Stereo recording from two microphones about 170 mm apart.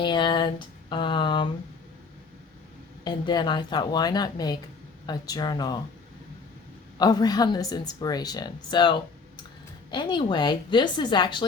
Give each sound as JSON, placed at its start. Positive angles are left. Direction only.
{"t": 0.0, "sound": "a sound", "side_deg": 25}
{"t": 3.0, "sound": "a woman's voice", "side_deg": 25}
{"t": 7.0, "sound": "a woman's voice", "side_deg": 25}